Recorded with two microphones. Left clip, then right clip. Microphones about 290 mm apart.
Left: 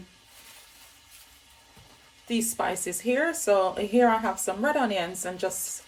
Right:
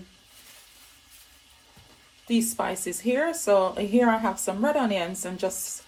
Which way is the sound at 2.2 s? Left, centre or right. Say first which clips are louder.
Right 1 dB; centre.